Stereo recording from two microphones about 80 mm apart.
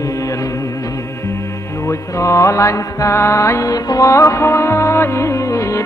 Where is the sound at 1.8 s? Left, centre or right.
Left.